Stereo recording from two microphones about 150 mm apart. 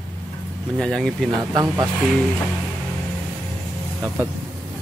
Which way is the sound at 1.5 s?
20° right (ahead or behind).